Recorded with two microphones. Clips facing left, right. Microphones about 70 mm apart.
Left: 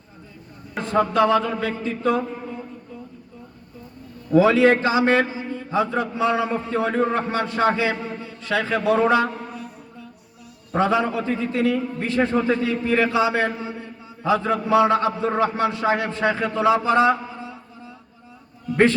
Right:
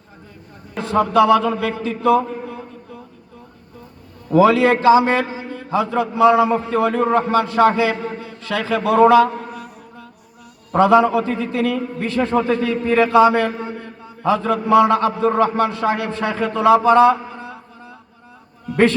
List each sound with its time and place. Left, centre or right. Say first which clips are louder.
0.9 s a man's voice: right 5 dB; right
4.3 s a man's voice: right 2 dB; right
5.5 s a man's voice: right 2 dB; right